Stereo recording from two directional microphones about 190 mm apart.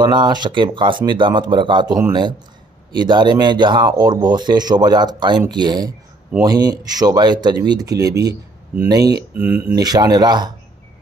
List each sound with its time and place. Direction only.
0.0 s speech: 25° right (ahead or behind)